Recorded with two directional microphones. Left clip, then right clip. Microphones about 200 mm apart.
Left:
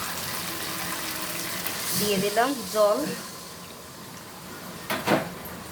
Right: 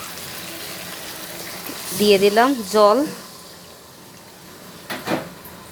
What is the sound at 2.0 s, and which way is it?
Speech, 40° right (ahead or behind).